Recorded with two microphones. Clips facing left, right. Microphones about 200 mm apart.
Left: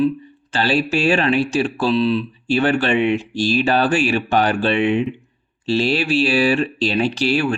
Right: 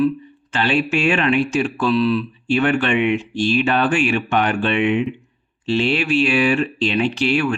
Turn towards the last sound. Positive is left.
turn(degrees=35)  # may be behind; listen again after turning